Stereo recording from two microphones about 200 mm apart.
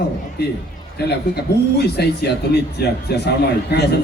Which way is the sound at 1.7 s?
55° left (ahead or behind).